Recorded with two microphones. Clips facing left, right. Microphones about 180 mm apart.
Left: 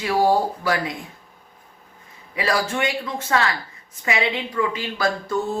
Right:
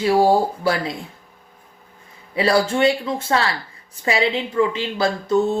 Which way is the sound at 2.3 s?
30° right (ahead or behind).